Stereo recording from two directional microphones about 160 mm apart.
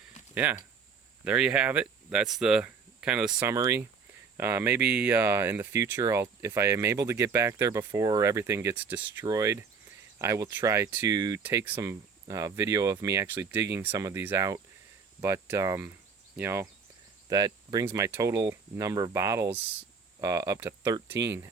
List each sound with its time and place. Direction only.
0.3 s speech: 10° right (ahead or behind)
3.4 s speech: 15° right (ahead or behind)
9.2 s speech: 20° right (ahead or behind)
17.2 s cricket: 25° right (ahead or behind)
17.8 s speech: 15° right (ahead or behind)